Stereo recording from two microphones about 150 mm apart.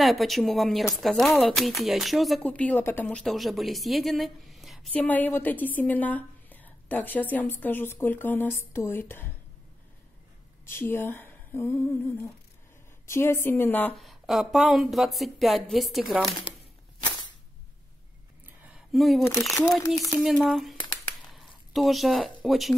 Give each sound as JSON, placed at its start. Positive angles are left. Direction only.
{"t": 0.0, "sound": "speech", "side_deg": 0}
{"t": 4.9, "sound": "a woman's voice", "side_deg": 10}
{"t": 10.6, "sound": "humming", "side_deg": 15}
{"t": 13.0, "sound": "a woman's voice", "side_deg": 15}
{"t": 13.9, "sound": "speech", "side_deg": 0}
{"t": 18.6, "sound": "a sound", "side_deg": -5}
{"t": 20.1, "sound": "speech", "side_deg": 0}